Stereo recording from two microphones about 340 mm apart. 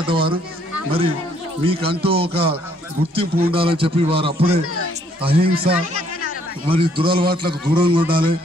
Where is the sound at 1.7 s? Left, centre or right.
Centre.